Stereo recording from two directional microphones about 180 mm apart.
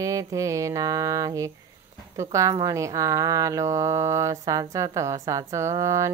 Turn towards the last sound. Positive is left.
turn(degrees=-15)  # may be behind; listen again after turning